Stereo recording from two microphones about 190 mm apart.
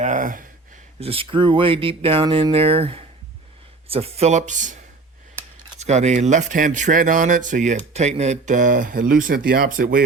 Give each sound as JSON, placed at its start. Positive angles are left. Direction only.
{"t": 0.0, "sound": "speech", "side_deg": -45}
{"t": 0.9, "sound": "speech", "side_deg": -30}
{"t": 5.8, "sound": "speech", "side_deg": -35}